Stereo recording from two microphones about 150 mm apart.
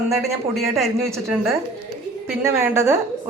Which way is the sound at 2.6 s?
15° right (ahead or behind).